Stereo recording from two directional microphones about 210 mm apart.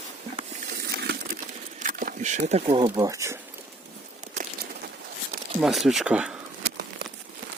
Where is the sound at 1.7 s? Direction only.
40° right (ahead or behind); by 3.4 s 15° right (ahead or behind).